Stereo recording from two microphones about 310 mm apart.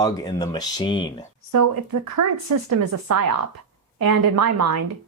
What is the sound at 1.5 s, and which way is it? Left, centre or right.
Speech, right.